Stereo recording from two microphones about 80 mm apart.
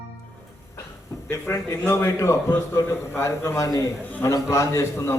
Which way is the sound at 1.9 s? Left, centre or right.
Left.